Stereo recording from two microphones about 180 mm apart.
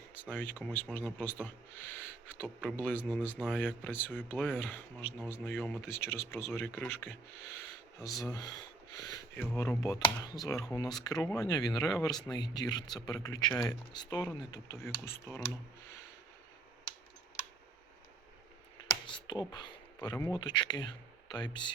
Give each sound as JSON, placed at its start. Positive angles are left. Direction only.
{"t": 0.2, "sound": "speech", "side_deg": 10}
{"t": 9.0, "sound": "a sound", "side_deg": 20}
{"t": 9.6, "sound": "speech", "side_deg": 15}
{"t": 18.9, "sound": "speech", "side_deg": 25}